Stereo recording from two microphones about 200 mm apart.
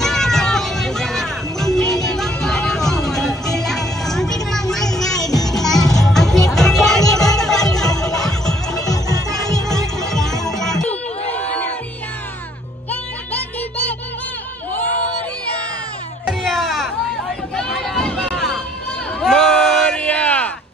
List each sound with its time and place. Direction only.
0.0 s music: centre (ahead or behind)
5.1 s music: 20° left (ahead or behind)
5.5 s music: centre (ahead or behind)
8.7 s music: 20° left (ahead or behind)
9.9 s music: centre (ahead or behind)
12.9 s music: 5° left (ahead or behind)
16.3 s music: centre (ahead or behind)
17.6 s a sound: 5° left (ahead or behind)